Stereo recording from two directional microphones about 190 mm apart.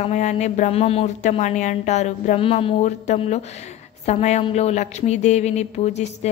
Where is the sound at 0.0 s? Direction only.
40° left (ahead or behind).